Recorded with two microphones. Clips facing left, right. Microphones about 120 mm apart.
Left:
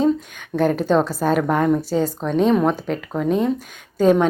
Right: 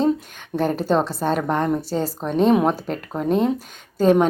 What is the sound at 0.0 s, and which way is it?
A woman's voice, centre (ahead or behind).